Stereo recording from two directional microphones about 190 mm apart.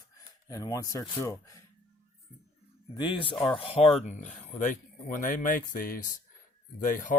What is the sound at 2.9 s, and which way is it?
Speech, 25° left (ahead or behind).